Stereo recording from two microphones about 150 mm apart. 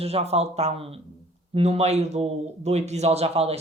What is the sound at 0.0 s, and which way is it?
A man's voice, 45° right (ahead or behind).